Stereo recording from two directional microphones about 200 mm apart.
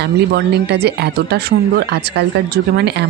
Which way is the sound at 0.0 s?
55° right (ahead or behind).